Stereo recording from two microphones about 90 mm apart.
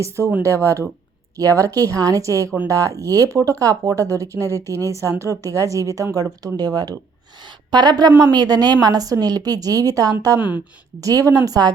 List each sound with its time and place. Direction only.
0.4 s a woman's voice: 35° right (ahead or behind)